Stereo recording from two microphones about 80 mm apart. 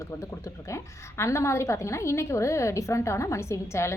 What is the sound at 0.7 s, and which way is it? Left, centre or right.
A woman's voice, left.